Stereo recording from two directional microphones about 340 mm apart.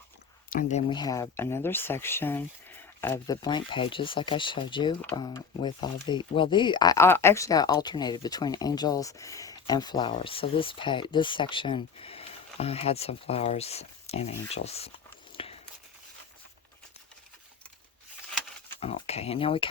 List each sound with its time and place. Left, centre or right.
0.5 s speech: centre
15.4 s walk: centre
18.8 s speech: centre